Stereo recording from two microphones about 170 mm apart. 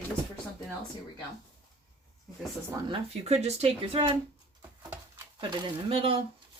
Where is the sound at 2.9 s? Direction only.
40° right (ahead or behind).